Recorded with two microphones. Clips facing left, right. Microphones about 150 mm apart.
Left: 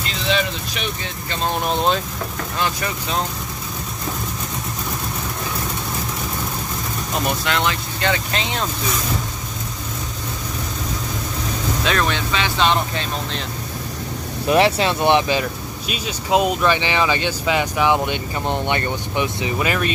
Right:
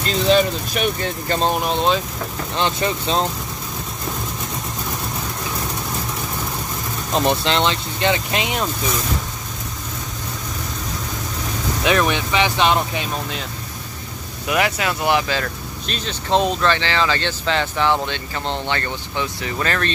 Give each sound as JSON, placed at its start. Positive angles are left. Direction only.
{"t": 0.0, "sound": "speech", "side_deg": -40}
{"t": 1.6, "sound": "speech", "side_deg": 0}
{"t": 2.5, "sound": "speech", "side_deg": -25}
{"t": 7.2, "sound": "speech", "side_deg": -25}
{"t": 11.8, "sound": "speech", "side_deg": -15}
{"t": 14.5, "sound": "speech", "side_deg": 30}